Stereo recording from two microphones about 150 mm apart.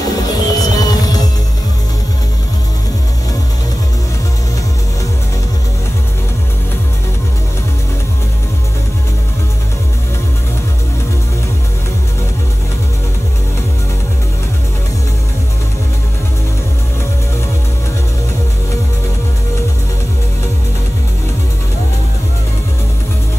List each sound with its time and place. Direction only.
0.1 s music: 25° left (ahead or behind)